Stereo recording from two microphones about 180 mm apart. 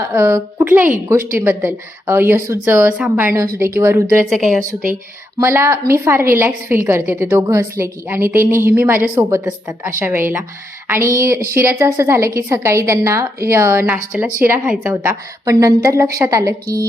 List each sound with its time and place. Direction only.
0.0 s a woman's voice: 15° right (ahead or behind)
4.3 s a woman's voice: centre (ahead or behind)
4.6 s speech: 50° right (ahead or behind)
5.4 s a woman's voice: 15° right (ahead or behind)